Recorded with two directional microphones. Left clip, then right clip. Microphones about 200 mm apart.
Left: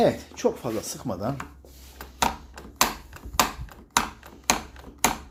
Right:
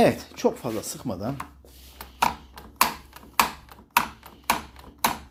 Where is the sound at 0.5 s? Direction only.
15° right (ahead or behind).